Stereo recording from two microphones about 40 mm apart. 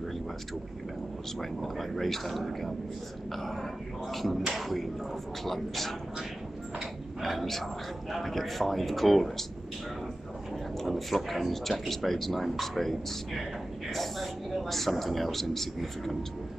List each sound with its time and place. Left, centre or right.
1.4 s speech: centre
4.1 s speech: centre
7.2 s speech: centre
10.8 s speech: centre